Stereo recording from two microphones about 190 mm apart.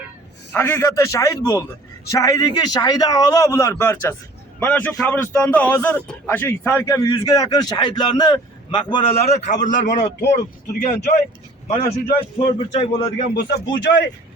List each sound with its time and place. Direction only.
0.5 s a man's voice: 15° left (ahead or behind); by 9.6 s 40° left (ahead or behind)
10.8 s a man's voice: 35° left (ahead or behind)
13.3 s speech: 70° left (ahead or behind)